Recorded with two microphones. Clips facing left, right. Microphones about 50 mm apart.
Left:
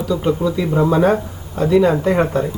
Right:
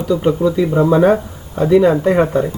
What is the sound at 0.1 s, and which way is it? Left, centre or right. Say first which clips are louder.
Speech: right 4 dB; centre.